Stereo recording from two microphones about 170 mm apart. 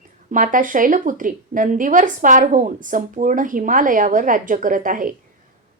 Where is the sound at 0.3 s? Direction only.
50° right (ahead or behind).